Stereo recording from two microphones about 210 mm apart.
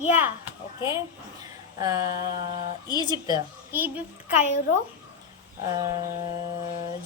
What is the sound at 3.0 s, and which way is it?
Speech, 20° right (ahead or behind).